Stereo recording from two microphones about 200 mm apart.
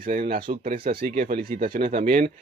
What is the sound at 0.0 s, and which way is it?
Speech, 45° right (ahead or behind).